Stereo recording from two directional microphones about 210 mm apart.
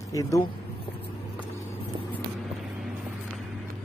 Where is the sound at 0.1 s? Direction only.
15° left (ahead or behind).